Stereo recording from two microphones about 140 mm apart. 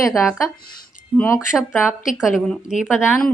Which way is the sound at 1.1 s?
15° left (ahead or behind).